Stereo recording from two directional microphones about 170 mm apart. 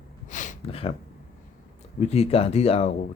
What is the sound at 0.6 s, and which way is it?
Speech, 35° left (ahead or behind).